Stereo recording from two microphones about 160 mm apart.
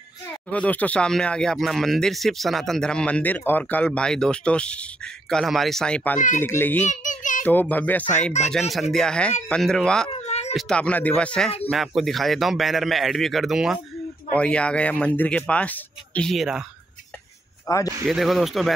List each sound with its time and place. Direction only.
0.5 s speech: 10° left (ahead or behind)
6.9 s a sound: 50° left (ahead or behind)
7.4 s speech: 10° left (ahead or behind)
8.5 s speech: centre (ahead or behind)
10.2 s a sound: 45° left (ahead or behind)
10.5 s speech: centre (ahead or behind)
17.6 s speech: 20° left (ahead or behind)
18.0 s speech: centre (ahead or behind)